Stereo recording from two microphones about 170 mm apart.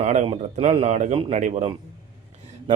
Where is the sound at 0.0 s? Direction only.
40° right (ahead or behind).